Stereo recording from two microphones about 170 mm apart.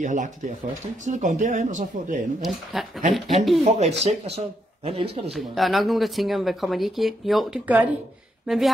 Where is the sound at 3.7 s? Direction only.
40° right (ahead or behind).